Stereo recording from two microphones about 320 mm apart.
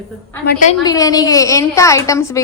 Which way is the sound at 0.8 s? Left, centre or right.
Centre.